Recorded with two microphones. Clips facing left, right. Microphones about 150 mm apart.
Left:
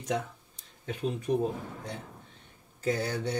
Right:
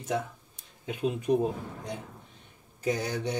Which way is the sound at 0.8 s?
15° right (ahead or behind).